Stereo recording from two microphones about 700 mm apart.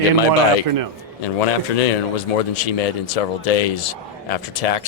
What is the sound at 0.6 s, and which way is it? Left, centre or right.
Speech, right.